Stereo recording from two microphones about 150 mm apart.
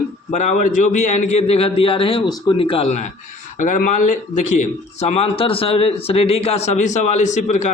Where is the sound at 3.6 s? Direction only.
60° left (ahead or behind).